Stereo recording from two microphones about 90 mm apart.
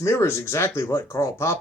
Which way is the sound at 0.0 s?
30° left (ahead or behind).